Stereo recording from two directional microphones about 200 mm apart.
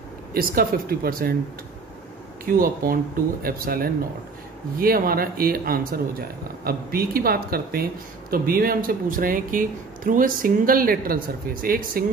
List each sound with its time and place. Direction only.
0.3 s speech: 50° right (ahead or behind)
2.4 s speech: 45° right (ahead or behind)